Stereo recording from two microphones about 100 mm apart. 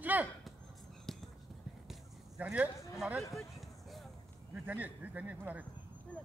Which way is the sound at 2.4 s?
15° right (ahead or behind).